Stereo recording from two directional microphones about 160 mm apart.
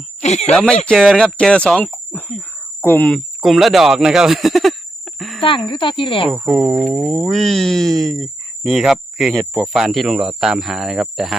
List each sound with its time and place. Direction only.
0.2 s speech: 45° left (ahead or behind)
0.5 s speech: 5° left (ahead or behind)
3.4 s speech: centre (ahead or behind)
5.4 s speech: 30° left (ahead or behind)
6.2 s speech: centre (ahead or behind)